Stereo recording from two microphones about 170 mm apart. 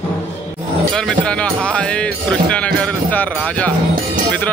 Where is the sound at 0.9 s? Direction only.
5° left (ahead or behind).